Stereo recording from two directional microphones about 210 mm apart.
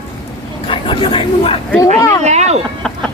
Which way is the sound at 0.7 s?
25° left (ahead or behind).